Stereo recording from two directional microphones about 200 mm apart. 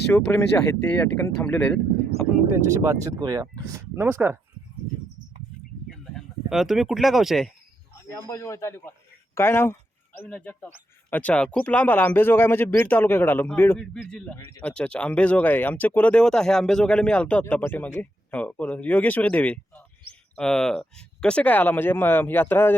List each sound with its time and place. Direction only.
0.1 s speech: 10° left (ahead or behind)
2.5 s speech: 15° right (ahead or behind)
6.1 s speech: centre (ahead or behind)
8.3 s speech: 15° left (ahead or behind)